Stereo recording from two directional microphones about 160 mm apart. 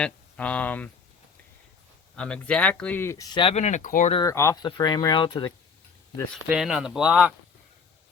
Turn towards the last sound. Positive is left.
turn(degrees=-5)  # may be behind; listen again after turning